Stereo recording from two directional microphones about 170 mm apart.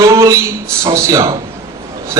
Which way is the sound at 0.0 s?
20° right (ahead or behind).